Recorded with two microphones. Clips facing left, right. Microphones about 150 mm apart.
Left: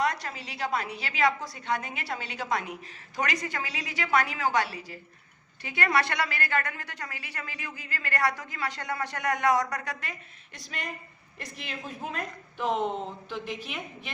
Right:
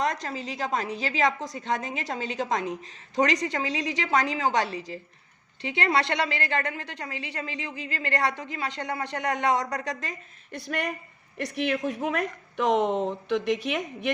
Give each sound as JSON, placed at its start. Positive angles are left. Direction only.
{"t": 0.1, "sound": "a woman's voice", "side_deg": -30}
{"t": 0.5, "sound": "a woman's voice", "side_deg": -40}
{"t": 10.5, "sound": "speech", "side_deg": -60}